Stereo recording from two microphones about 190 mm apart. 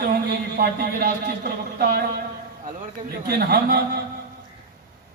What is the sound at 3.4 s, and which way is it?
Speech, 55° right (ahead or behind).